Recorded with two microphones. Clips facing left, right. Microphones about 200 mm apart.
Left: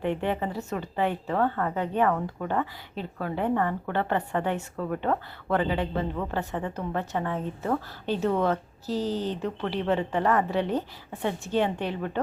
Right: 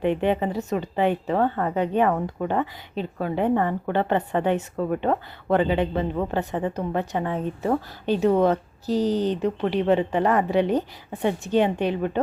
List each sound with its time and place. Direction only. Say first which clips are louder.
0.0 s speech: right 5 dB; 20° right (ahead or behind)